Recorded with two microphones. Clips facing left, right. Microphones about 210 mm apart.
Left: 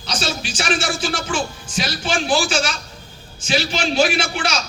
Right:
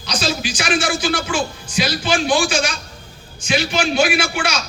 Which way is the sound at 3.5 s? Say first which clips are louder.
Right 2 dB; 30° left (ahead or behind).